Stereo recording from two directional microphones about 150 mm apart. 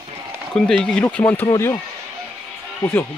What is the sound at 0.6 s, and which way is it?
Speech, 5° left (ahead or behind).